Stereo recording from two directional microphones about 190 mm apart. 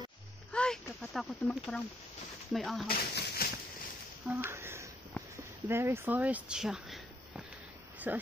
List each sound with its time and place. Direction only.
0.5 s a sound: 5° left (ahead or behind)
2.5 s speech: centre (ahead or behind)
2.9 s speech: 55° left (ahead or behind)
4.3 s speech: 10° right (ahead or behind)